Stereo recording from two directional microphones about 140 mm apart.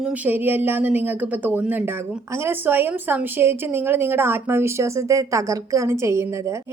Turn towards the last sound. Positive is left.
turn(degrees=-20)  # may be behind; listen again after turning